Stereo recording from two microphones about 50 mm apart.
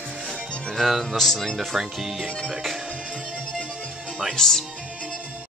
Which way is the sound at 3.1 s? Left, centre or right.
Centre.